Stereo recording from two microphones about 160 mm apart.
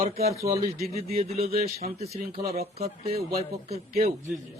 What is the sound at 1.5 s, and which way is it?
Speech, 70° right (ahead or behind).